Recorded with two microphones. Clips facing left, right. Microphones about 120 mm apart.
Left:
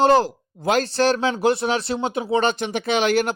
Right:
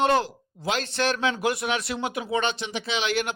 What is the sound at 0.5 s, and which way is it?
A man's voice, 50° left (ahead or behind).